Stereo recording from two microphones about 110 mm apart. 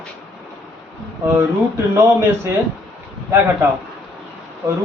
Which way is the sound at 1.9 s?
25° right (ahead or behind).